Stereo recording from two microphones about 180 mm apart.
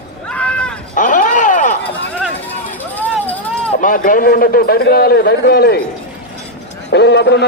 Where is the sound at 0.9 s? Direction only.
45° left (ahead or behind).